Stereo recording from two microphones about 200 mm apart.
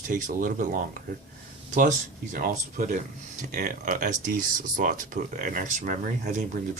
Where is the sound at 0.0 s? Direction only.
40° right (ahead or behind).